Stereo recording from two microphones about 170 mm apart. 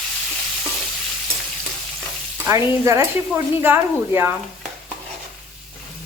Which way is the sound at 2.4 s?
15° right (ahead or behind).